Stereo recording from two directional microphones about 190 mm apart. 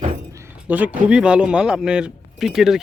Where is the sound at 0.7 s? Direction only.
10° right (ahead or behind).